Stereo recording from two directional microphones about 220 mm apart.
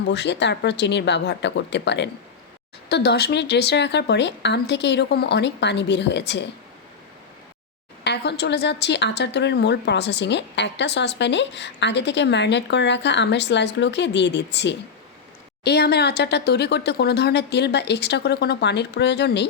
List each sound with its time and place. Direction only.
0.1 s a woman's voice: 50° left (ahead or behind)
8.0 s a woman's voice: 50° left (ahead or behind)